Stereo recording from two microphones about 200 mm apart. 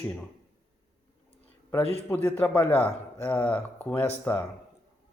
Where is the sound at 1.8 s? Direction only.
30° left (ahead or behind).